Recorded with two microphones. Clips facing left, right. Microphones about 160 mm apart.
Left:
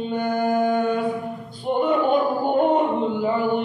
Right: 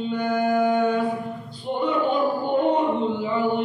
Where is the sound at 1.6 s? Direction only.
50° left (ahead or behind).